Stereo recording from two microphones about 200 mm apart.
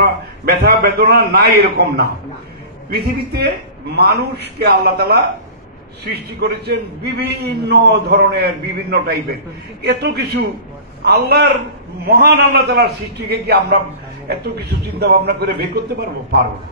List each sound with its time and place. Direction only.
0.0 s a man's voice: 50° right (ahead or behind)
6.4 s a man's voice: 55° right (ahead or behind)